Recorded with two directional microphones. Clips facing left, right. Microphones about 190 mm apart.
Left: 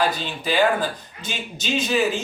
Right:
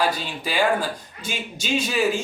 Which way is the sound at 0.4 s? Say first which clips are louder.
Left 2 dB; 10° right (ahead or behind).